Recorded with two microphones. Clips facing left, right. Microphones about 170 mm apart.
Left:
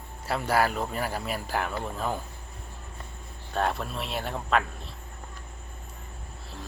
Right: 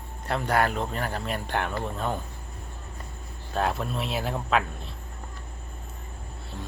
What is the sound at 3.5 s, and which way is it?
Speech, centre (ahead or behind).